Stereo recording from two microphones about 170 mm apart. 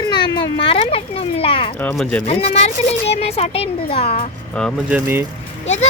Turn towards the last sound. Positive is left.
turn(degrees=40)  # may be behind; listen again after turning